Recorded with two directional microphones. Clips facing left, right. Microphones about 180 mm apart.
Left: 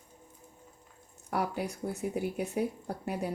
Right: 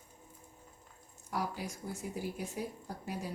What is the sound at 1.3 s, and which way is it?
Speech, 65° left (ahead or behind).